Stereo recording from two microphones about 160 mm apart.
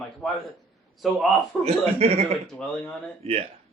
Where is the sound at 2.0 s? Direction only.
40° right (ahead or behind).